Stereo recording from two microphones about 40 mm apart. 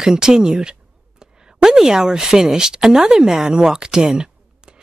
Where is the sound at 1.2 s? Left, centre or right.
Centre.